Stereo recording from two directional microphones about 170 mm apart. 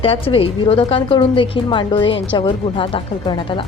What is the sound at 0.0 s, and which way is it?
A woman's voice, 35° left (ahead or behind).